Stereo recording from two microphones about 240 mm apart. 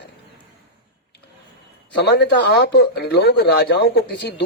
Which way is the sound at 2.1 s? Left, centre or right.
Left.